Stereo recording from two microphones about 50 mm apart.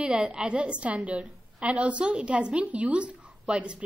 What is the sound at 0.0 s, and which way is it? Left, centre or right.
A woman's voice, right.